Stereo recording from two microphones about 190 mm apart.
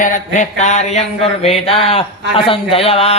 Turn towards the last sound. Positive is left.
turn(degrees=30)  # may be behind; listen again after turning